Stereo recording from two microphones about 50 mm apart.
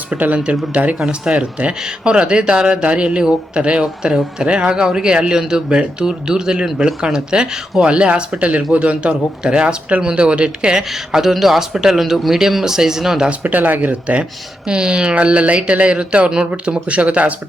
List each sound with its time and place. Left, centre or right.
0.1 s a man's voice: right
0.9 s speech: centre
1.3 s a man's voice: right
13.4 s a man's voice: right